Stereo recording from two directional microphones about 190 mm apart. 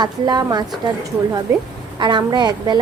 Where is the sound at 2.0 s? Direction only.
25° right (ahead or behind).